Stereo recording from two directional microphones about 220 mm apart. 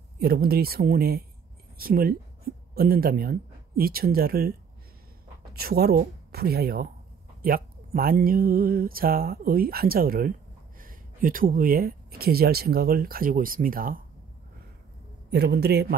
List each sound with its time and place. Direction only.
0.2 s speech: 45° right (ahead or behind)
15.2 s speech: 50° right (ahead or behind)